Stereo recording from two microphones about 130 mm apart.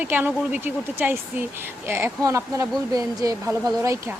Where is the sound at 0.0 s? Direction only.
15° right (ahead or behind).